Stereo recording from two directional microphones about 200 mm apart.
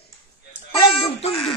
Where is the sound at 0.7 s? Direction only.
25° left (ahead or behind).